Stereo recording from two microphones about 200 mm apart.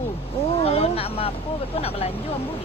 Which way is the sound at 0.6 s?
30° left (ahead or behind).